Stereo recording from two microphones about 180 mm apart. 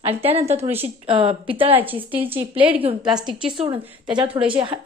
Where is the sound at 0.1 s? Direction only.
35° right (ahead or behind).